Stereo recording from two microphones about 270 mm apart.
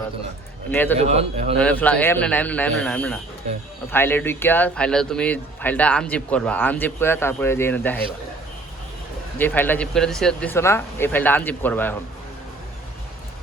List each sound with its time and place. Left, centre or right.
0.7 s speech: centre
0.9 s a man's voice: right
1.5 s a man's voice: centre
9.4 s speech: centre